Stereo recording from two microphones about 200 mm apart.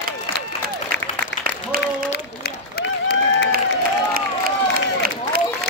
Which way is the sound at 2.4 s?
50° left (ahead or behind).